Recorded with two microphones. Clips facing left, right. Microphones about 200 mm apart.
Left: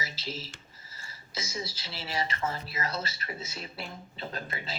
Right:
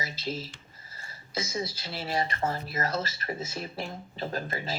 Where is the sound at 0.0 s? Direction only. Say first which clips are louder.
Right 4 dB; 55° right (ahead or behind).